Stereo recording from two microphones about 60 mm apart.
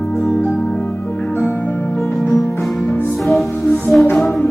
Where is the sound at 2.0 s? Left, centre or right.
Centre.